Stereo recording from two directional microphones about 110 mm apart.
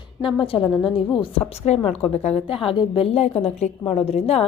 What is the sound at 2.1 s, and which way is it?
A woman's voice, 75° left (ahead or behind).